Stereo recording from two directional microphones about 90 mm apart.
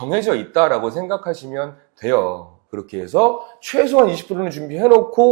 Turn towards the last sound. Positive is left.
turn(degrees=-15)  # may be behind; listen again after turning